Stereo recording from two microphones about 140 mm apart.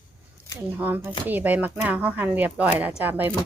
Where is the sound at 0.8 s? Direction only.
15° right (ahead or behind).